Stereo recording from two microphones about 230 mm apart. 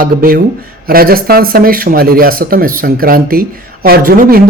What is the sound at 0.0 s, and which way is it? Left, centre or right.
A man's voice, right.